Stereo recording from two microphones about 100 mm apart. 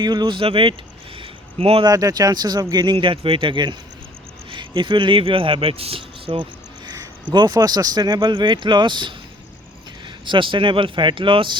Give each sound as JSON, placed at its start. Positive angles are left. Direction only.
{"t": 0.0, "sound": "speech", "side_deg": -45}
{"t": 0.4, "sound": "speech", "side_deg": -60}
{"t": 1.2, "sound": "a sound", "side_deg": -75}
{"t": 1.8, "sound": "speech", "side_deg": -35}
{"t": 10.2, "sound": "speech", "side_deg": -55}